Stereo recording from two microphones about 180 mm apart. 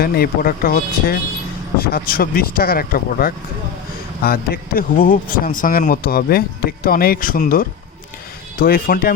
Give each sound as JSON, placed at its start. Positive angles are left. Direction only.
{"t": 0.0, "sound": "a man's voice", "side_deg": 55}